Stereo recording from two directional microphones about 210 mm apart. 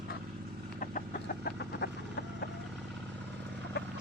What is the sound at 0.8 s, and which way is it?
Vehicle, 45° left (ahead or behind).